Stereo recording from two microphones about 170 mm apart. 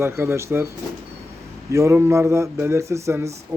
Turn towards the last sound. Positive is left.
turn(degrees=-15)  # may be behind; listen again after turning